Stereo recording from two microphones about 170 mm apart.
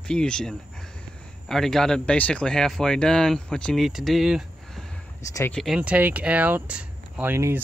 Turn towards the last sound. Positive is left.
turn(degrees=-15)  # may be behind; listen again after turning